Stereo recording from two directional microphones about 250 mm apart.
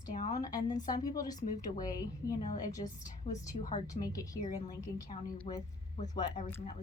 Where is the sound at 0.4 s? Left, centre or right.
Centre.